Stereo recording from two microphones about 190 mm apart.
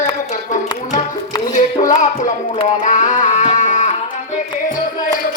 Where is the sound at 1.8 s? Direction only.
35° left (ahead or behind).